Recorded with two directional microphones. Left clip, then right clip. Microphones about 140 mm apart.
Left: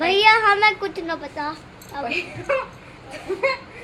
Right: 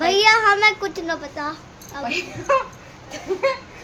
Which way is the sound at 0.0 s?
Centre (ahead or behind).